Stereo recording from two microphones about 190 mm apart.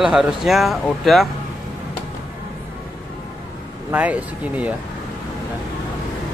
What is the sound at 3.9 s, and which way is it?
Speech, 5° right (ahead or behind).